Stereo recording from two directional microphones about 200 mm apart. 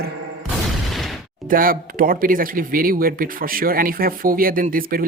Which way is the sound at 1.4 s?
45° right (ahead or behind).